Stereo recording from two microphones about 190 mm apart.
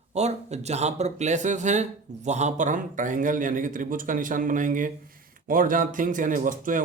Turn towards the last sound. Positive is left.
turn(degrees=-45)  # may be behind; listen again after turning